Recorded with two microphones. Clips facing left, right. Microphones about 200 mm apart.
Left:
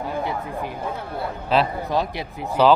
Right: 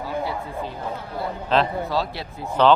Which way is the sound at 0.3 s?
15° left (ahead or behind).